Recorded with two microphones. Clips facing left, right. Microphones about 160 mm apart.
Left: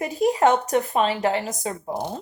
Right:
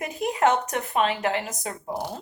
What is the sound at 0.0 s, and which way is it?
A woman's voice, 30° left (ahead or behind).